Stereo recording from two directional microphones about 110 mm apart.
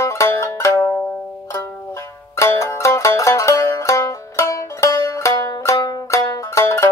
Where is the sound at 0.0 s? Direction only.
25° left (ahead or behind).